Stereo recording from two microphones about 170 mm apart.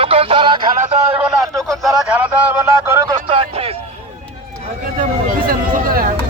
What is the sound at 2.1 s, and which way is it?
Speech, 10° right (ahead or behind).